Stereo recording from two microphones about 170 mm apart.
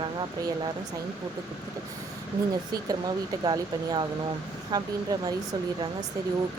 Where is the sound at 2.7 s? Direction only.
25° right (ahead or behind).